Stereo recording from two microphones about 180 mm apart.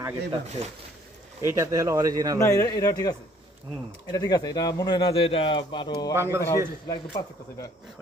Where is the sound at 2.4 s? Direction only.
15° left (ahead or behind).